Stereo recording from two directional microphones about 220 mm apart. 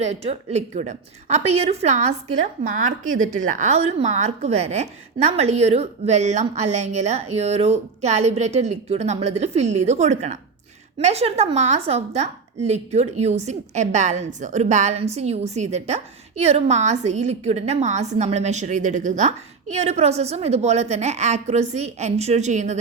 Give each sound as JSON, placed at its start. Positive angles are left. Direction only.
{"t": 0.0, "sound": "a woman's voice", "side_deg": -30}